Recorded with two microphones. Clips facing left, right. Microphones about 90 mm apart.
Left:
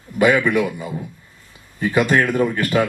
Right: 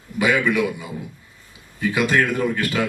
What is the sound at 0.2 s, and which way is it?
Speech, 50° left (ahead or behind).